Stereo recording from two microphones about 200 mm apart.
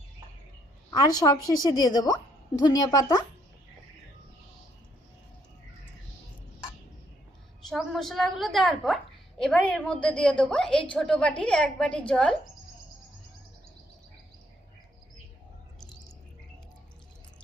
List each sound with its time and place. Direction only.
0.9 s a woman's voice: 20° left (ahead or behind)
7.7 s a woman's voice: centre (ahead or behind)